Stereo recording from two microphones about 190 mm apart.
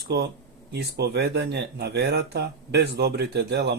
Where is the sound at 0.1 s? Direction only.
60° right (ahead or behind).